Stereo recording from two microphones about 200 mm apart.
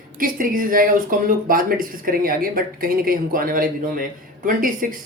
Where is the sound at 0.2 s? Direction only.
45° right (ahead or behind).